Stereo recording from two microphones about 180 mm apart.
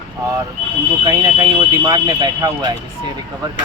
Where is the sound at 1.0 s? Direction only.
20° right (ahead or behind).